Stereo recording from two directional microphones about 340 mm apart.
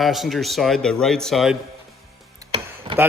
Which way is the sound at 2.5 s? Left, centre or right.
Centre.